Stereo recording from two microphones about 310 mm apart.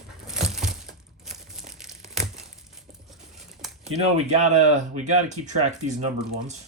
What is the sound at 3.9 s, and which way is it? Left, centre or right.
Speech, right.